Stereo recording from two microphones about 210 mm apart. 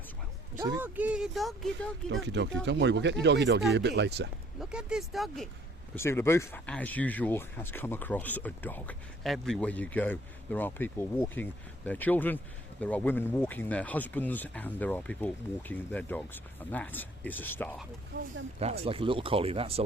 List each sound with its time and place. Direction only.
0.8 s speech: 5° right (ahead or behind)
2.2 s speech: 55° right (ahead or behind)
4.6 s speech: 5° right (ahead or behind)
6.0 s speech: 10° left (ahead or behind)
18.6 s speech: 25° right (ahead or behind)